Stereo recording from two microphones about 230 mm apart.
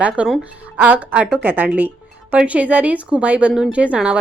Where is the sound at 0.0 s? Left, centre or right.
Centre.